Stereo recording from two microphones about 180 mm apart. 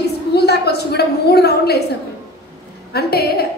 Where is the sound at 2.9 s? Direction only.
60° left (ahead or behind).